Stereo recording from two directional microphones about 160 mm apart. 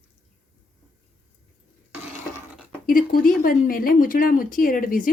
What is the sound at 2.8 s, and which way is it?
Speech, 60° left (ahead or behind).